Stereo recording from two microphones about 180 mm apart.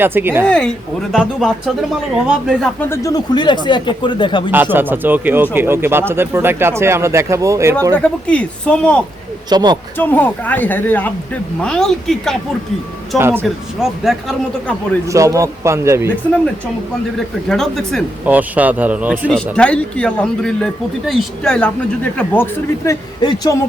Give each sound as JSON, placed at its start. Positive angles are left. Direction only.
{"t": 0.0, "sound": "speech", "side_deg": -10}
{"t": 0.4, "sound": "speech", "side_deg": 5}
{"t": 2.9, "sound": "speech", "side_deg": 20}
{"t": 4.5, "sound": "speech", "side_deg": -10}
{"t": 7.9, "sound": "speech", "side_deg": 5}
{"t": 9.5, "sound": "speech", "side_deg": -20}
{"t": 10.0, "sound": "speech", "side_deg": 10}
{"t": 13.1, "sound": "speech", "side_deg": -15}
{"t": 13.4, "sound": "speech", "side_deg": 0}
{"t": 15.0, "sound": "speech", "side_deg": -15}
{"t": 17.5, "sound": "speech", "side_deg": 0}
{"t": 18.3, "sound": "speech", "side_deg": -10}
{"t": 19.5, "sound": "speech", "side_deg": 5}
{"t": 22.9, "sound": "speech", "side_deg": 20}